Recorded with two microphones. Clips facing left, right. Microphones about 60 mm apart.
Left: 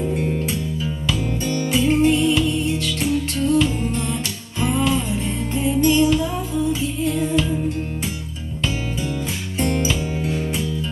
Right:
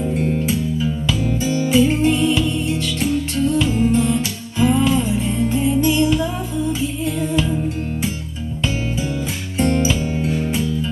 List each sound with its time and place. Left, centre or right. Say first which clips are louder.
0.0 s music: right 2 dB; centre
9.6 s music: right 4 dB; centre